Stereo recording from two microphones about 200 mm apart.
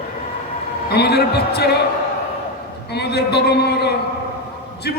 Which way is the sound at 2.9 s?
55° left (ahead or behind).